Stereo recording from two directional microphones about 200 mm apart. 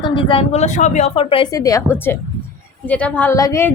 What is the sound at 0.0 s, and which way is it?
A woman's voice, 25° left (ahead or behind).